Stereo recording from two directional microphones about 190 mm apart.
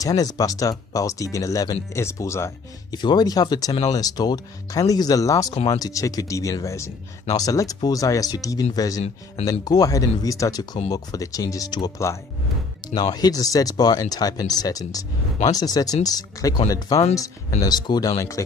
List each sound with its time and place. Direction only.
0.0 s speech: 20° left (ahead or behind)